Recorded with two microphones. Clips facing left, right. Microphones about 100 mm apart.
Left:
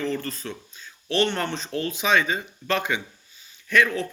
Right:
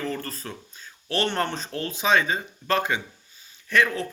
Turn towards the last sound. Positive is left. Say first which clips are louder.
# left 1 dB
turn(degrees=-30)  # may be behind; listen again after turning